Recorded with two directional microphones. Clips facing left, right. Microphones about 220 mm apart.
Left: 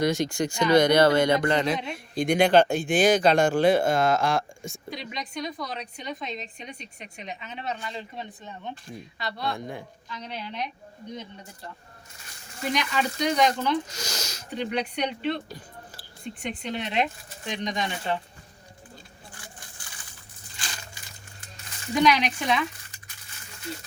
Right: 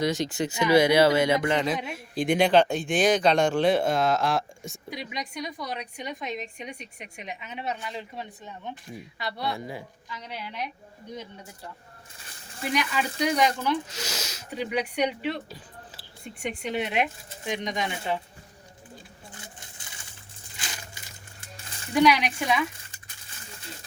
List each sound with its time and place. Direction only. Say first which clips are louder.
0.0 s speech: left 2 dB; centre (ahead or behind)
5.1 s a woman's voice: left 3 dB; 10° right (ahead or behind)
12.7 s a woman's voice: even; 10° right (ahead or behind)
19.3 s coin: right 1 dB; 20° right (ahead or behind)
22.0 s a woman's voice: even; 10° right (ahead or behind)
22.9 s coin: even; 30° right (ahead or behind)